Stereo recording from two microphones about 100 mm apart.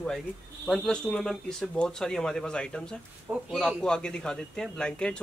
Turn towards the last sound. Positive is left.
turn(degrees=10)  # may be behind; listen again after turning